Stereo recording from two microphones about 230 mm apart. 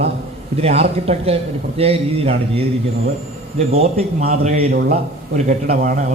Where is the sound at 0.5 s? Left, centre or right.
Right.